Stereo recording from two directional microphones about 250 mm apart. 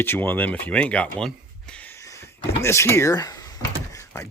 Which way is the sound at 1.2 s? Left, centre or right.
Centre.